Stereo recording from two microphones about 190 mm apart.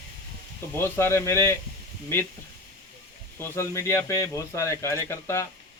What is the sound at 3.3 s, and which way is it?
Speech, 15° left (ahead or behind).